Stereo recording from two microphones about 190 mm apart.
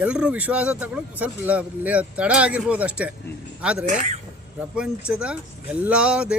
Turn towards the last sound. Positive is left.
turn(degrees=-5)  # may be behind; listen again after turning